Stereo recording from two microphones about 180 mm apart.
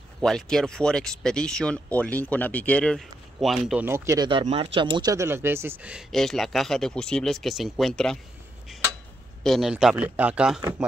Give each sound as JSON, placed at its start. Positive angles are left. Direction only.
{"t": 0.2, "sound": "speech", "side_deg": 5}
{"t": 3.8, "sound": "speech", "side_deg": -15}
{"t": 4.3, "sound": "speech", "side_deg": -30}
{"t": 9.4, "sound": "speech", "side_deg": 0}